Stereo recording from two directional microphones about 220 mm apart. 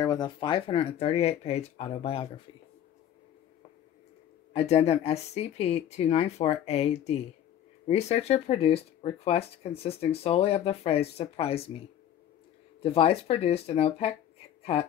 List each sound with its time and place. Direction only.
0.0 s speech: 20° left (ahead or behind)
4.6 s speech: 30° left (ahead or behind)
12.8 s speech: 25° left (ahead or behind)